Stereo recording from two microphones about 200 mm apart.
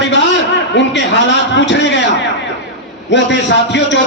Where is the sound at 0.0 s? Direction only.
65° left (ahead or behind).